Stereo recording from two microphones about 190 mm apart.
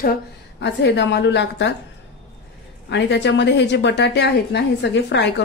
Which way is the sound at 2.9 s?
65° left (ahead or behind).